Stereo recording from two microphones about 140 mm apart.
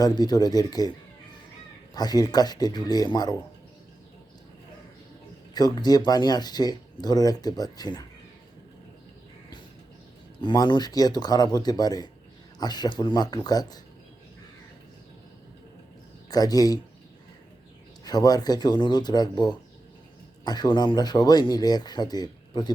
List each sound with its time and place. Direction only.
0.0 s speech: 30° left (ahead or behind)
5.5 s speech: 30° left (ahead or behind)
10.4 s speech: 30° left (ahead or behind)
16.3 s speech: 25° left (ahead or behind)
18.0 s speech: 30° left (ahead or behind)